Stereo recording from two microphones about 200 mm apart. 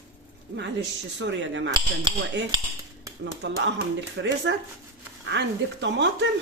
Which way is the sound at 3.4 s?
65° right (ahead or behind).